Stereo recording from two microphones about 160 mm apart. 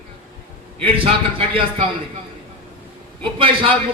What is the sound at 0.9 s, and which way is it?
Speech, 35° right (ahead or behind).